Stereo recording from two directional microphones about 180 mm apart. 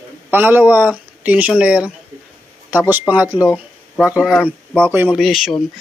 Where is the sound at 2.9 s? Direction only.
10° right (ahead or behind).